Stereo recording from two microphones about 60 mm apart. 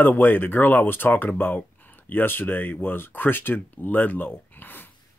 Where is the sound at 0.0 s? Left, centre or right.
Left.